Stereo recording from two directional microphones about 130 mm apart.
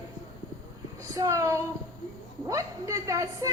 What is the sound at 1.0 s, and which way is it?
A woman's voice, 25° right (ahead or behind).